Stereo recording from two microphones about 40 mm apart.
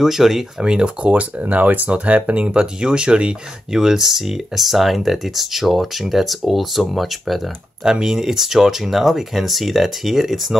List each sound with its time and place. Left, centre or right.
0.0 s speech: centre
0.7 s speech: right
1.4 s speech: right; by 7.3 s centre
7.8 s speech: centre